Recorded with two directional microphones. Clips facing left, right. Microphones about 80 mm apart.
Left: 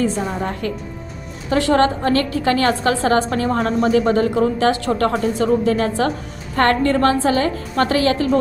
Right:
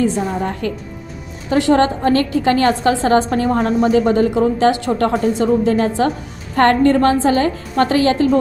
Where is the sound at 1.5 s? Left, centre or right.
Right.